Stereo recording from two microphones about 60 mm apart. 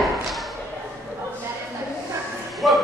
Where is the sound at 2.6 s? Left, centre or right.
Centre.